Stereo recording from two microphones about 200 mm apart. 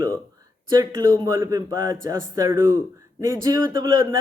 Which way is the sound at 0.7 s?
20° right (ahead or behind).